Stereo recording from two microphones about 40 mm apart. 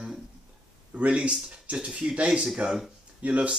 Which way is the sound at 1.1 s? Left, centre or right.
Right.